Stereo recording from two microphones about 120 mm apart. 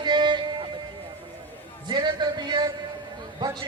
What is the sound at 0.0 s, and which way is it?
Music, 40° right (ahead or behind).